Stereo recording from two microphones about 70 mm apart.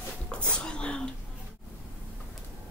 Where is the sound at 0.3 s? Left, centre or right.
Centre.